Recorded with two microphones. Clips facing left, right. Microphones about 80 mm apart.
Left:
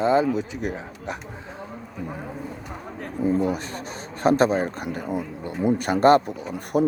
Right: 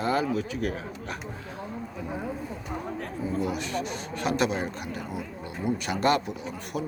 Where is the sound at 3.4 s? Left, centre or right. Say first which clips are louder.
Left 3 dB; left.